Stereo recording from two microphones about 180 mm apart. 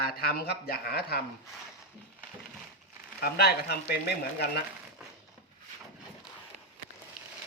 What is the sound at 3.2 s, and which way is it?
A man's voice, 60° left (ahead or behind).